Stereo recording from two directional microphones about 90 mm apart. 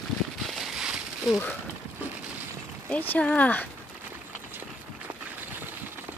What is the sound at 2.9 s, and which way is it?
Speech, 20° left (ahead or behind).